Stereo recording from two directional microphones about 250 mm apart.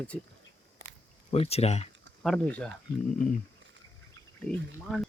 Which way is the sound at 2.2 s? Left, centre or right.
Centre.